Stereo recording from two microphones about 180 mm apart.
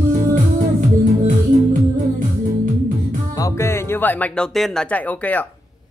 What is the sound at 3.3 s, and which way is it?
Speech, 15° left (ahead or behind).